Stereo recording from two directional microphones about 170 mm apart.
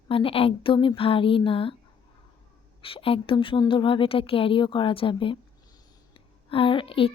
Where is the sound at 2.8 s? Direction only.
35° left (ahead or behind).